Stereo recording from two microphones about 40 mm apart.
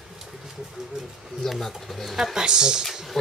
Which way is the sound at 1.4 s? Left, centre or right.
Centre.